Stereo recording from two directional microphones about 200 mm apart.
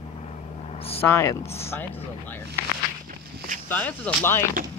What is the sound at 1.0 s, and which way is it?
Speech, 10° left (ahead or behind).